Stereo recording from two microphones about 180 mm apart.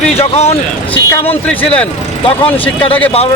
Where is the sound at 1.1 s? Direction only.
10° left (ahead or behind).